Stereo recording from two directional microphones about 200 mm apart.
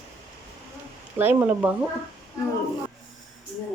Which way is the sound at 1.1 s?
10° right (ahead or behind).